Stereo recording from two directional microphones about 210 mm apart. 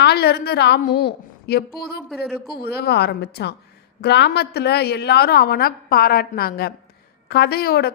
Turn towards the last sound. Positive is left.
turn(degrees=50)  # may be behind; listen again after turning